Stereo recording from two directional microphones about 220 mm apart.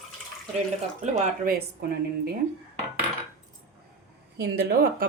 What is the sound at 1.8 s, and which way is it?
Speech, 45° right (ahead or behind).